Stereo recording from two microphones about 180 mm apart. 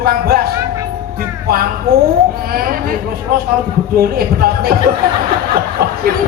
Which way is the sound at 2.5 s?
55° right (ahead or behind).